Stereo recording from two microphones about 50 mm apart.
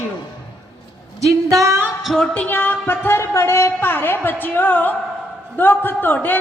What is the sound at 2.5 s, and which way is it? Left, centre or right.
Music, left.